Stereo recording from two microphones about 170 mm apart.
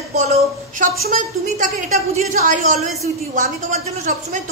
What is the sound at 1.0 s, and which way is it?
A woman's voice, 50° right (ahead or behind).